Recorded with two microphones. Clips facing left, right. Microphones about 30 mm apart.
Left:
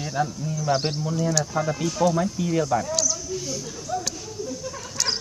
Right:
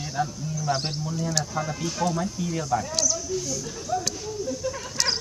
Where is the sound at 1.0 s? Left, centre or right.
Left.